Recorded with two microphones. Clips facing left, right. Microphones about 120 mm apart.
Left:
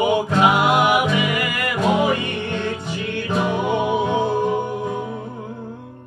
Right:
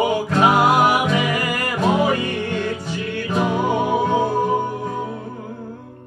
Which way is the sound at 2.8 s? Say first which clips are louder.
Even; 20° left (ahead or behind).